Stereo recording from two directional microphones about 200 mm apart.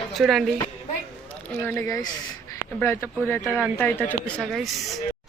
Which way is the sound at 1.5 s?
10° left (ahead or behind).